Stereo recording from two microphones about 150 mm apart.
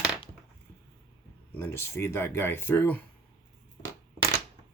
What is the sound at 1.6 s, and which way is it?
Speech, 15° left (ahead or behind).